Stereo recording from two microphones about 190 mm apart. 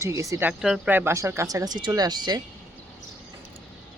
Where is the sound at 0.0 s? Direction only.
15° right (ahead or behind).